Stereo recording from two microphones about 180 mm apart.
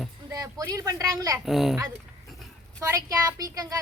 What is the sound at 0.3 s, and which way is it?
Speech, 20° right (ahead or behind).